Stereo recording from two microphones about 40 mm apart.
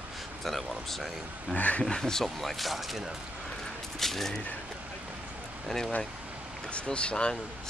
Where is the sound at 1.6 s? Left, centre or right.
Left.